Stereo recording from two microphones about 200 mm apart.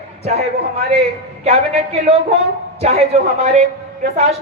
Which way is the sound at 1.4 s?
30° right (ahead or behind).